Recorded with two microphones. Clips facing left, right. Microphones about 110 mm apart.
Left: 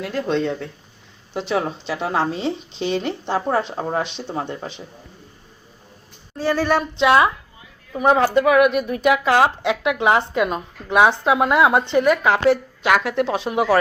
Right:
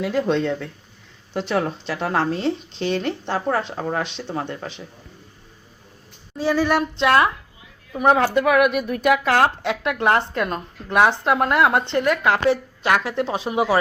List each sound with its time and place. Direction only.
0.0 s speech: 5° right (ahead or behind); by 4.7 s 25° left (ahead or behind)
6.3 s speech: centre (ahead or behind)